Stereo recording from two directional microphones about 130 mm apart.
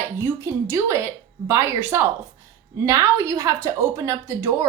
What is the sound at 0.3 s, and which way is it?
A woman's voice, 20° right (ahead or behind).